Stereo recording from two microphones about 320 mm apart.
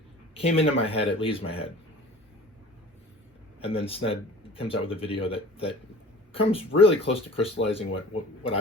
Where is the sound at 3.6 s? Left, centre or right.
Centre.